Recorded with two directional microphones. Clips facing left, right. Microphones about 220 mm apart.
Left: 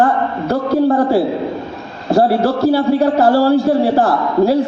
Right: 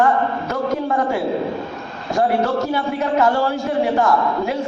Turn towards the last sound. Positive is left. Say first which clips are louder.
# left 5 dB
turn(degrees=35)  # may be behind; listen again after turning